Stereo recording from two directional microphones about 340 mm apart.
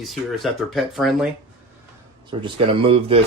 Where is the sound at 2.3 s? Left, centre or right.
Centre.